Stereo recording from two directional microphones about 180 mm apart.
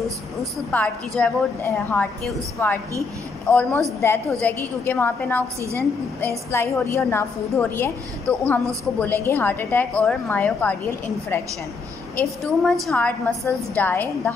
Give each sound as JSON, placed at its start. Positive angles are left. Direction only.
{"t": 0.7, "sound": "a woman's voice", "side_deg": 5}
{"t": 5.6, "sound": "a woman's voice", "side_deg": -15}
{"t": 6.2, "sound": "a woman's voice", "side_deg": 15}
{"t": 12.2, "sound": "a woman's voice", "side_deg": 0}